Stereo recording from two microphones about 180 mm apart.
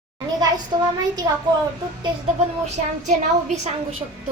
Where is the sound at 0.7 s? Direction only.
20° right (ahead or behind).